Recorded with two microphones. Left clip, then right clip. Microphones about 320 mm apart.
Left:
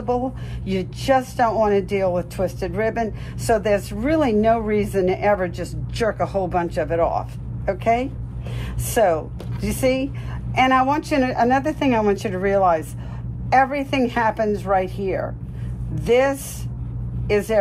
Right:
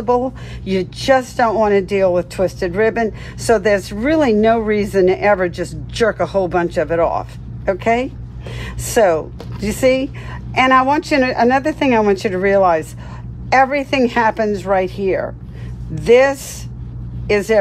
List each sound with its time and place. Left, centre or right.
0.0 s speech: right